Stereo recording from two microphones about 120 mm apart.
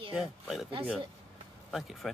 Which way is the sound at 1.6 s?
Centre (ahead or behind).